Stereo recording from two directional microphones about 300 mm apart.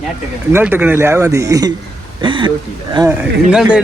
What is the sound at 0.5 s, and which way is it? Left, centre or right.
Speech, centre.